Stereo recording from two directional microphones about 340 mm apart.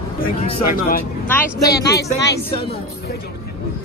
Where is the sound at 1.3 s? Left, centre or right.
Centre.